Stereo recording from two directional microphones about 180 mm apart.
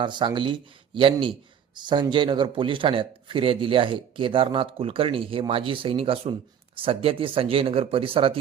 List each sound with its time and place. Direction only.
0.0 s a man's voice: 25° right (ahead or behind)